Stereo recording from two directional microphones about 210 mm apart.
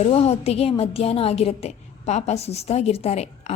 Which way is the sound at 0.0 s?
30° left (ahead or behind).